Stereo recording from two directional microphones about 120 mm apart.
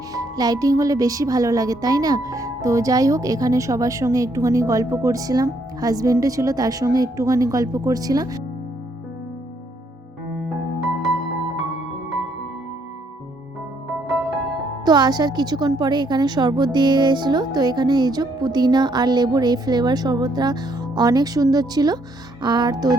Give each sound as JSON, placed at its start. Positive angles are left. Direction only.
{"t": 0.1, "sound": "speech", "side_deg": -30}
{"t": 14.8, "sound": "a woman's voice", "side_deg": -35}